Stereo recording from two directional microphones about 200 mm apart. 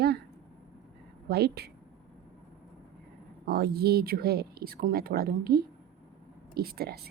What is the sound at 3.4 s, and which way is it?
Speech, 50° right (ahead or behind).